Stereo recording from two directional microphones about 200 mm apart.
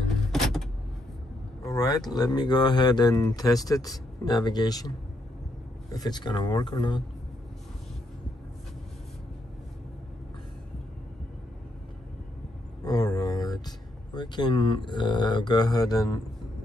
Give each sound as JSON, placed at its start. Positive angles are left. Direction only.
{"t": 0.3, "sound": "vehicle", "side_deg": 0}
{"t": 1.6, "sound": "speech", "side_deg": 15}
{"t": 12.8, "sound": "speech", "side_deg": 20}